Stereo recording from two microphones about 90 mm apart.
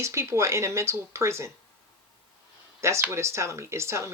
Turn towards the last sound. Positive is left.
turn(degrees=-30)  # may be behind; listen again after turning